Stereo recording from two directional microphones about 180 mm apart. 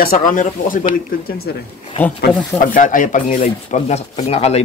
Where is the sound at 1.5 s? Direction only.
65° left (ahead or behind).